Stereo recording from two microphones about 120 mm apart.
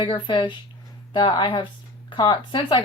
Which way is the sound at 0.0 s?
40° left (ahead or behind).